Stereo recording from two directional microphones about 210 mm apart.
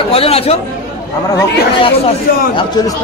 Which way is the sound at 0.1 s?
30° left (ahead or behind).